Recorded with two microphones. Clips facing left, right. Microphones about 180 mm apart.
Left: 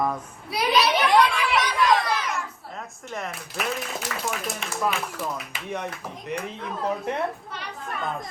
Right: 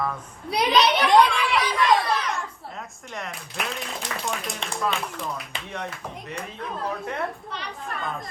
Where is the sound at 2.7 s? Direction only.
Centre (ahead or behind).